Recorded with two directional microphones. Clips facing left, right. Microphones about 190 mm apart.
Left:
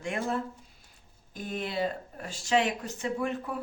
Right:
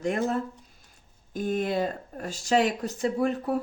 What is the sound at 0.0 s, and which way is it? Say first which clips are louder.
Speech: right 5 dB; 40° right (ahead or behind).